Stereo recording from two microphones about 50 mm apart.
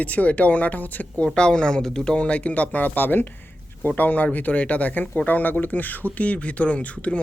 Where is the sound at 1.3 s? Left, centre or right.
Centre.